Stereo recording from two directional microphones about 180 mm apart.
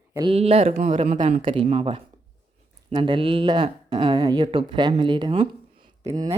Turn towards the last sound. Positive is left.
turn(degrees=-20)  # may be behind; listen again after turning